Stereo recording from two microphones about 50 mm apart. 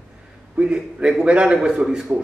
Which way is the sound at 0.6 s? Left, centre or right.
Centre.